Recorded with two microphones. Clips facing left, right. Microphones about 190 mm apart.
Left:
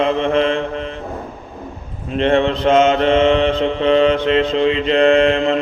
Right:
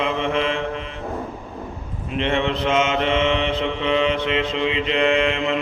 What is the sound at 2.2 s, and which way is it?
Mantra, 40° left (ahead or behind).